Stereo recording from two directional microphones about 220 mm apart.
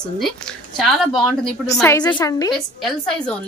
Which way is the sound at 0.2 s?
Centre (ahead or behind).